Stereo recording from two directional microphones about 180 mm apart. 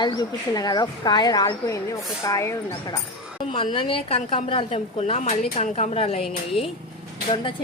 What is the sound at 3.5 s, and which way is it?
A woman's voice, 30° left (ahead or behind).